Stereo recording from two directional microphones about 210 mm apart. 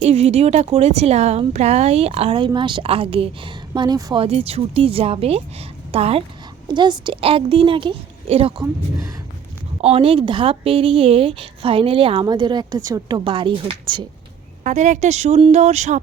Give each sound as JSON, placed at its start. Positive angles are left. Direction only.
{"t": 0.0, "sound": "speech", "side_deg": -30}
{"t": 9.8, "sound": "speech", "side_deg": -25}
{"t": 14.6, "sound": "speech", "side_deg": -35}